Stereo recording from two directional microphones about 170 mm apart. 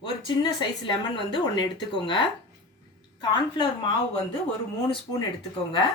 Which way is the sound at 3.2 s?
25° left (ahead or behind).